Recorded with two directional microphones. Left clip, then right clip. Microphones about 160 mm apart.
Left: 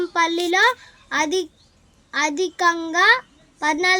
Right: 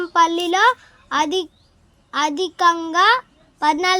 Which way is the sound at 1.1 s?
30° right (ahead or behind).